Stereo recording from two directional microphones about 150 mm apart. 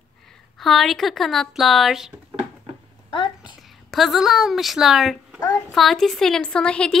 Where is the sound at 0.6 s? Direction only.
Centre (ahead or behind).